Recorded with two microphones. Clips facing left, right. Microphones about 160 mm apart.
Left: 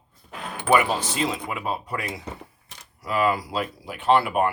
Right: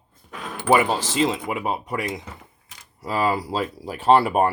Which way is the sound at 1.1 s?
25° right (ahead or behind).